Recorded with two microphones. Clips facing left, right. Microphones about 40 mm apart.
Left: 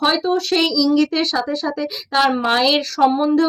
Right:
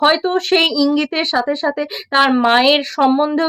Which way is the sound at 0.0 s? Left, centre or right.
Right.